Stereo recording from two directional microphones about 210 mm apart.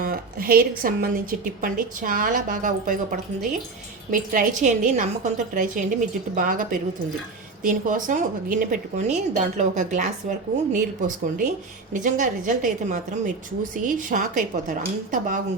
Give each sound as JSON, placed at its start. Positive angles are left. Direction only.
{"t": 0.0, "sound": "a woman's voice", "side_deg": -45}